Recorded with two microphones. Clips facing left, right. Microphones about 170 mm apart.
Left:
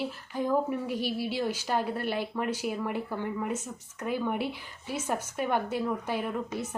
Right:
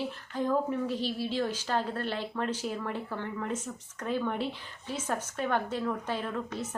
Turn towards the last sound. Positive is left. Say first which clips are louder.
# left 2 dB
turn(degrees=10)  # may be behind; listen again after turning